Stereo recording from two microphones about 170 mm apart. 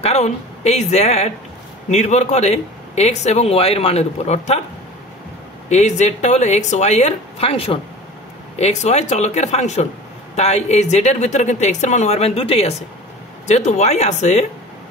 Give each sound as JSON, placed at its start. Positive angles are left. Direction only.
{"t": 0.0, "sound": "speech", "side_deg": 40}
{"t": 5.7, "sound": "a woman's voice", "side_deg": 40}